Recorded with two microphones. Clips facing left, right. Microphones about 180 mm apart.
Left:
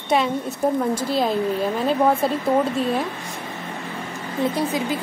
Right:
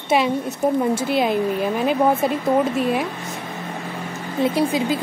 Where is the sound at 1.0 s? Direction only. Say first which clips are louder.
Right 2 dB; 25° right (ahead or behind).